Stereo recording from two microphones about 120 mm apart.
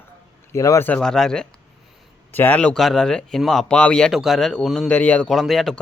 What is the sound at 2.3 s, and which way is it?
Speech, 15° left (ahead or behind).